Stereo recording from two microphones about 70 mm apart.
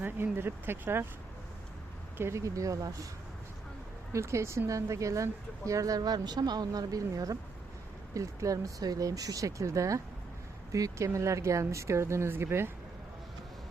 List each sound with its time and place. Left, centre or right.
0.0 s speech: right
2.1 s speech: right
2.4 s a woman's voice: right
4.1 s a woman's voice: right